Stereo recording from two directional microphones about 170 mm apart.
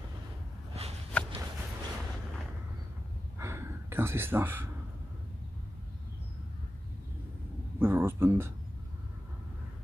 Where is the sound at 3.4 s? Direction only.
15° right (ahead or behind).